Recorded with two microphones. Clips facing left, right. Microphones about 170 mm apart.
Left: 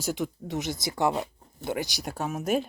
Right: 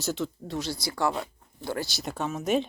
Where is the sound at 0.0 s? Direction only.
15° left (ahead or behind).